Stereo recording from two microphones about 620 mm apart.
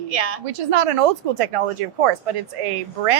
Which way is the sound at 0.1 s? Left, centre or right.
Right.